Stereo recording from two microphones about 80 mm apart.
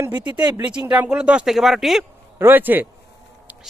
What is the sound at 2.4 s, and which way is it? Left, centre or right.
Speech, right.